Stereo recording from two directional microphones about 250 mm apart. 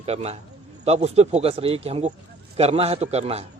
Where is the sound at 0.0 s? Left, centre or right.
Right.